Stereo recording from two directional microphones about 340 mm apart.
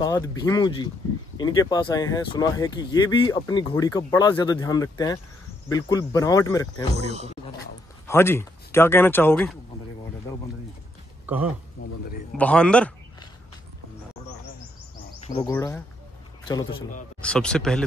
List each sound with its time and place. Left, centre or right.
0.0 s speech: centre
7.0 s speech: centre
8.1 s speech: centre
11.2 s speech: centre
11.8 s a sound: left
12.4 s speech: centre
15.2 s speech: centre
17.2 s speech: centre